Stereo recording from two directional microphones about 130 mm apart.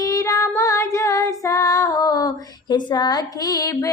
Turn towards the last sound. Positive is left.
turn(degrees=30)  # may be behind; listen again after turning